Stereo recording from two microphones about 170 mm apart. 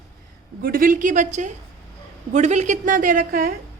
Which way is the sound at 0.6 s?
60° right (ahead or behind).